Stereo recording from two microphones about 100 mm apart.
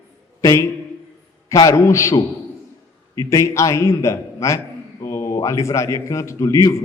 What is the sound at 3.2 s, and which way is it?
A man's voice, 30° left (ahead or behind).